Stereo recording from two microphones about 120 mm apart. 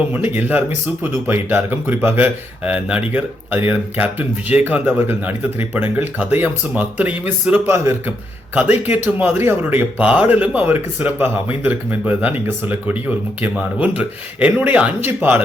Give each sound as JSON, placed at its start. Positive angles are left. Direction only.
{"t": 0.1, "sound": "speech", "side_deg": -15}